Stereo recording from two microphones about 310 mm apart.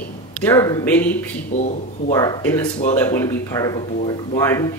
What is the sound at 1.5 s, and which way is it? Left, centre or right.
Speech, left.